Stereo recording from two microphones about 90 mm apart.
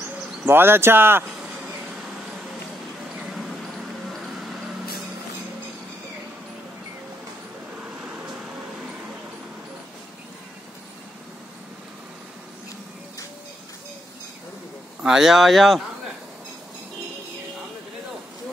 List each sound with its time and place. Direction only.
0.5 s speech: 25° right (ahead or behind)
3.2 s a sound: 5° right (ahead or behind)
4.1 s vehicle: centre (ahead or behind)
15.0 s speech: 5° right (ahead or behind)